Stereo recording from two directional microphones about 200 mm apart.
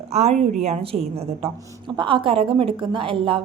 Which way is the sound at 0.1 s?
30° right (ahead or behind).